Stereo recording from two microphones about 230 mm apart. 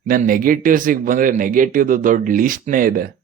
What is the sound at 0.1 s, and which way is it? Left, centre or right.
Speech, right.